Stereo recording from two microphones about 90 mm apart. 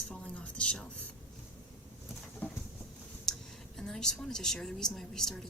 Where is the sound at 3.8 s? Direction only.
5° left (ahead or behind).